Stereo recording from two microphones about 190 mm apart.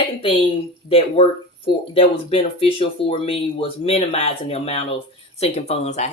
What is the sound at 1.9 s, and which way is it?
Speech, 30° left (ahead or behind).